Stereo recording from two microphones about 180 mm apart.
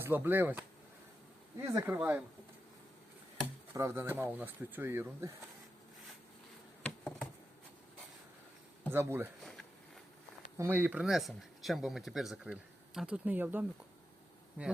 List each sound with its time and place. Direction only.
0.0 s speech: 10° right (ahead or behind)
1.7 s speech: 15° right (ahead or behind)
3.8 s speech: 15° right (ahead or behind)
6.8 s a sound: 5° left (ahead or behind)
8.9 s speech: 15° right (ahead or behind)
9.4 s a sound: centre (ahead or behind)
10.6 s speech: 10° right (ahead or behind)